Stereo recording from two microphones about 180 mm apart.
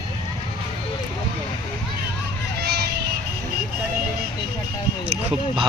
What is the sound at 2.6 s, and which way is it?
Music, 65° right (ahead or behind).